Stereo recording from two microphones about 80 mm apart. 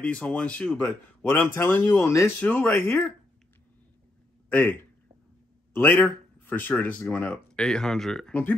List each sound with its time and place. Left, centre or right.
0.0 s a man's voice: centre
1.9 s speech: left
4.5 s speech: centre
8.3 s a man's voice: left